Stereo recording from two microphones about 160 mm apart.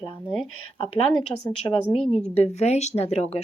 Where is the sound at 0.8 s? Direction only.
35° left (ahead or behind).